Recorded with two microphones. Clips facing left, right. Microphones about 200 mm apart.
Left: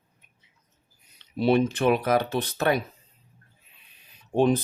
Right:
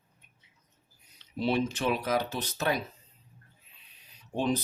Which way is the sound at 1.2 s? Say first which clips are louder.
Left 7 dB; 60° left (ahead or behind).